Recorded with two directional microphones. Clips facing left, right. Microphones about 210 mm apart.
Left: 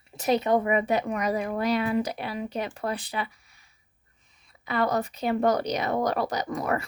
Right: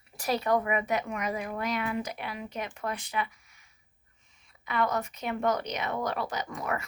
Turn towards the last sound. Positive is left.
turn(degrees=35)  # may be behind; listen again after turning